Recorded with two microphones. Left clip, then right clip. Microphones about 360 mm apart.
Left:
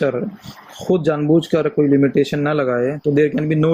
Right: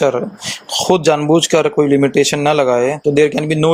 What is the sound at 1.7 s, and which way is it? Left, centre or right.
Speech, right.